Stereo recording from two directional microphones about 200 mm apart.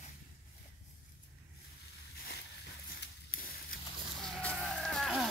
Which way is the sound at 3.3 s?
45° left (ahead or behind).